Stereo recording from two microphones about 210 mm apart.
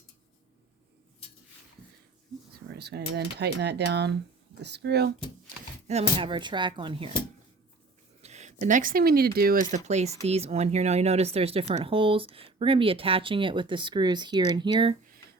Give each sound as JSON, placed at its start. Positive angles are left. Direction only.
{"t": 2.5, "sound": "speech", "side_deg": -50}
{"t": 5.9, "sound": "speech", "side_deg": -25}
{"t": 8.2, "sound": "speech", "side_deg": -35}